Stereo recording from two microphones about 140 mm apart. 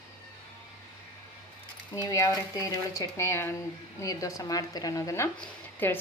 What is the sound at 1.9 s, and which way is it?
Speech, 25° left (ahead or behind).